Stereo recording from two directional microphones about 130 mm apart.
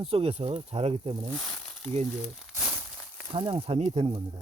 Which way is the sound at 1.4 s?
10° left (ahead or behind).